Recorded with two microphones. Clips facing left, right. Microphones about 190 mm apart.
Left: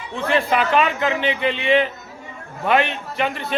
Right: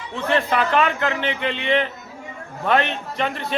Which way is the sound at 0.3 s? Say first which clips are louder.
Left 1 dB; 15° left (ahead or behind).